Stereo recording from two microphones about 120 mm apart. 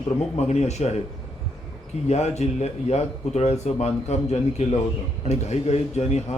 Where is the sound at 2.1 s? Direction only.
65° left (ahead or behind).